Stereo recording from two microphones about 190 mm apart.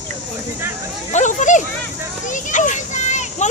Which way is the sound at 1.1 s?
40° left (ahead or behind).